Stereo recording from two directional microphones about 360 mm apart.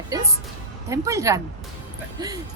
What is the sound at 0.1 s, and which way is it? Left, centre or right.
Music, centre.